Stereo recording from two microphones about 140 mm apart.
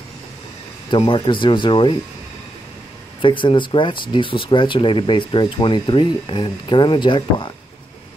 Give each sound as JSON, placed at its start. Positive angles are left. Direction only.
{"t": 0.8, "sound": "speech", "side_deg": 35}
{"t": 3.2, "sound": "speech", "side_deg": 35}